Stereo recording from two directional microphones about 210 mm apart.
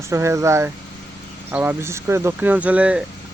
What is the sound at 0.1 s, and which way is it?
Speech, 15° right (ahead or behind).